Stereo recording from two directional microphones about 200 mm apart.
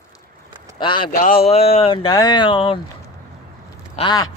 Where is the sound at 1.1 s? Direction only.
45° left (ahead or behind).